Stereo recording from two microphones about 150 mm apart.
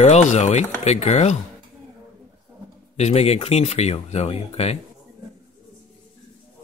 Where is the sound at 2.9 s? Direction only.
45° left (ahead or behind).